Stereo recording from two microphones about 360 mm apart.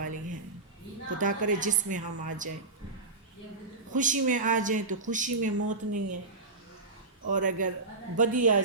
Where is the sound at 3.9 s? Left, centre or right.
Right.